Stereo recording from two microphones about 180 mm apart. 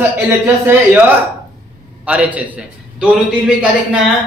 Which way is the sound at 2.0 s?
10° right (ahead or behind).